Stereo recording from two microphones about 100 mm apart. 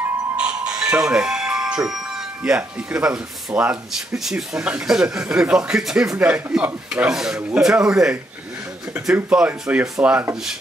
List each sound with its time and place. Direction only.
0.4 s music: 10° right (ahead or behind)
2.4 s speech: 10° right (ahead or behind)
6.1 s speech: 20° right (ahead or behind)